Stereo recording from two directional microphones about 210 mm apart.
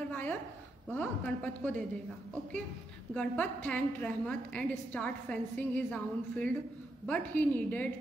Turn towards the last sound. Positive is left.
turn(degrees=5)  # may be behind; listen again after turning